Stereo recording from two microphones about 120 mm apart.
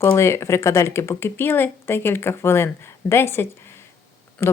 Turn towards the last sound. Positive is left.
turn(degrees=20)  # may be behind; listen again after turning